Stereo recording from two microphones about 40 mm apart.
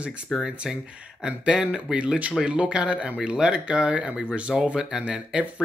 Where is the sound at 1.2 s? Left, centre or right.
Right.